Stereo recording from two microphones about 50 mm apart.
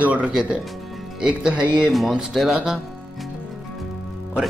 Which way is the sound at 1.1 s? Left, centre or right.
Centre.